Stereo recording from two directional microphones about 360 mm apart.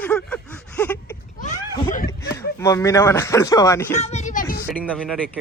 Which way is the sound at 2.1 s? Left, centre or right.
Centre.